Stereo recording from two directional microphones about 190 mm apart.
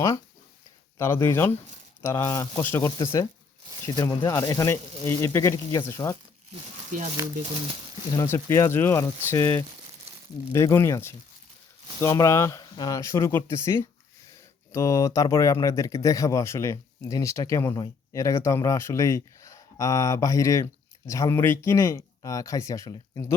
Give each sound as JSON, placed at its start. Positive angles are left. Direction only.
{"t": 0.9, "sound": "speech", "side_deg": 15}
{"t": 6.5, "sound": "speech", "side_deg": -40}
{"t": 8.1, "sound": "speech", "side_deg": 15}